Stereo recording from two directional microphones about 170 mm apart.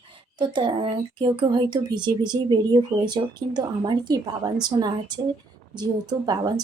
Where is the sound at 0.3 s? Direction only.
30° right (ahead or behind).